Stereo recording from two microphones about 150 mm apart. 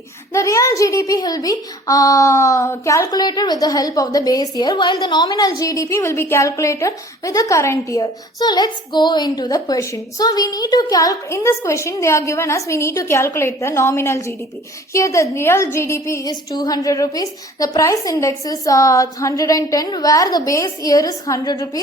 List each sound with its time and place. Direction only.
0.3 s a woman's voice: 20° left (ahead or behind)